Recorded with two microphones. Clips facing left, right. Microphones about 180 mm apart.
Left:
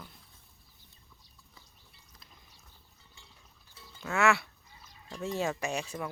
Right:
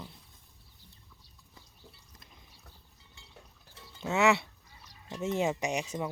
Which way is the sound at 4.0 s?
20° right (ahead or behind).